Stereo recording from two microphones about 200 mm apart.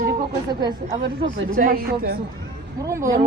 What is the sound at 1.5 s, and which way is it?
Speech, 45° right (ahead or behind).